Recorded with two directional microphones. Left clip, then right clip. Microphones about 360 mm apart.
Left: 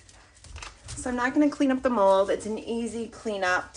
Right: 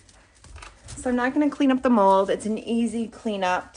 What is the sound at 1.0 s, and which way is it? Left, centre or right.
Speech, centre.